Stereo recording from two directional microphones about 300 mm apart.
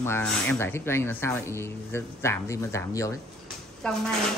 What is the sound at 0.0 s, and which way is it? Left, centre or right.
A woman's voice, centre.